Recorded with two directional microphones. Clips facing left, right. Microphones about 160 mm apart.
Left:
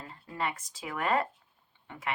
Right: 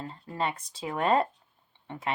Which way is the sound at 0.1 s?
25° right (ahead or behind).